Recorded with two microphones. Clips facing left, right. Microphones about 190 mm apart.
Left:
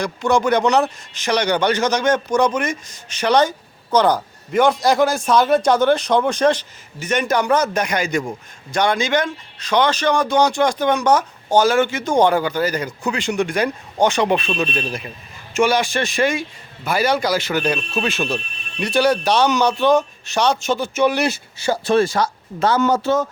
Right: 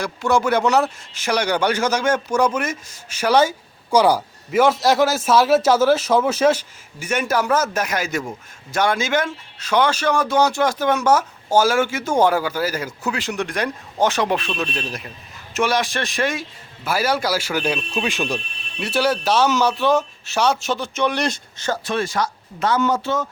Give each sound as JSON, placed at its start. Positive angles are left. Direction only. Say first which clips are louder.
{"t": 0.0, "sound": "a man's voice", "louder": "left 2 dB", "side_deg": -5}
{"t": 21.8, "sound": "speech", "louder": "left 8 dB", "side_deg": 35}